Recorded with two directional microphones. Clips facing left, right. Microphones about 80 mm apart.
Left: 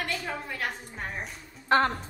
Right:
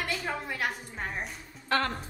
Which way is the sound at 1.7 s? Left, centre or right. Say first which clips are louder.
Left 5 dB; left.